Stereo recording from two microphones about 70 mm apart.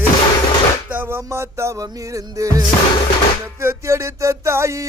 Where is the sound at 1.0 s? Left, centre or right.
Right.